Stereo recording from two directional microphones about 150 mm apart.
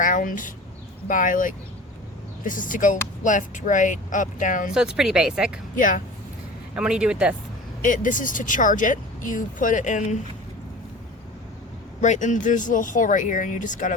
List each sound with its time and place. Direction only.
0.0 s speech: 60° left (ahead or behind)
4.7 s speech: 5° right (ahead or behind)
5.7 s speech: 65° left (ahead or behind)
6.7 s speech: 5° right (ahead or behind)
7.8 s speech: 60° left (ahead or behind)
11.9 s speech: 55° left (ahead or behind)